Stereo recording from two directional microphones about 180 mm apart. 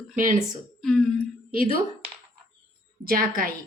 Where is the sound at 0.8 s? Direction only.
Centre (ahead or behind).